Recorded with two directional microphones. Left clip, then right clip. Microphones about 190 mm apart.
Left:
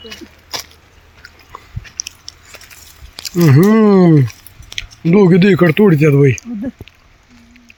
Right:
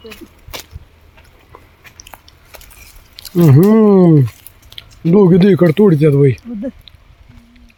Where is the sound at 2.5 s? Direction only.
15° left (ahead or behind).